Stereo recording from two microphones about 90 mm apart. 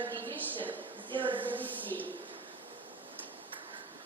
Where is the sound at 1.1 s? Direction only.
70° right (ahead or behind).